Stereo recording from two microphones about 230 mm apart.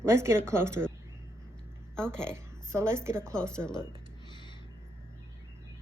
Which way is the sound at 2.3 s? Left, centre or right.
Centre.